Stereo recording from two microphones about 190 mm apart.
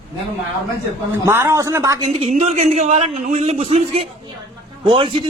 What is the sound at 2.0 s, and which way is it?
A man's voice, 35° right (ahead or behind).